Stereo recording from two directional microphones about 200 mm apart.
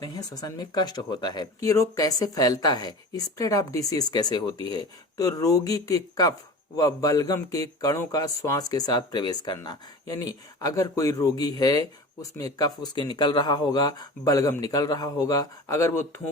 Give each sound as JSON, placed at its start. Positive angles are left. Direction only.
{"t": 0.0, "sound": "a man's voice", "side_deg": 20}